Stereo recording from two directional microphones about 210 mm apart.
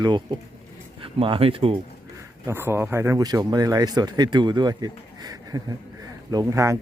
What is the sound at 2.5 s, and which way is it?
Speech, 10° right (ahead or behind).